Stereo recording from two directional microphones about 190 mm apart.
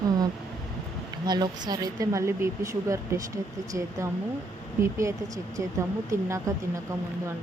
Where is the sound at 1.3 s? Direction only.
20° right (ahead or behind).